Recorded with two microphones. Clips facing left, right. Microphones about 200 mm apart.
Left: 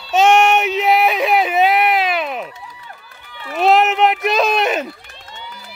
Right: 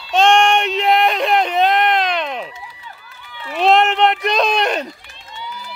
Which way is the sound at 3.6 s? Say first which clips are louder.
Even; 5° left (ahead or behind).